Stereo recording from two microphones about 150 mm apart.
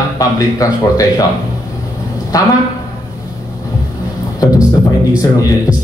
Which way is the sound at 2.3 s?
25° left (ahead or behind).